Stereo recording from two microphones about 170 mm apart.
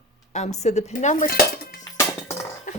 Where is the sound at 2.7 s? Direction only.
50° left (ahead or behind).